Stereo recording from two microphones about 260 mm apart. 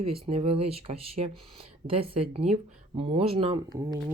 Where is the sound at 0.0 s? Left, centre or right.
Right.